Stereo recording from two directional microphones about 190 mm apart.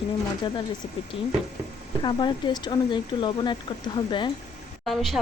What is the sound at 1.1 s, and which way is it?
Speech, 30° left (ahead or behind).